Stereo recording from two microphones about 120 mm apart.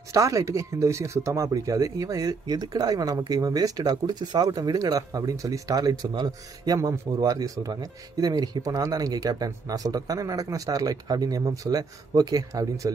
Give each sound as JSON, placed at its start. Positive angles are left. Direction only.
{"t": 0.1, "sound": "speech", "side_deg": -25}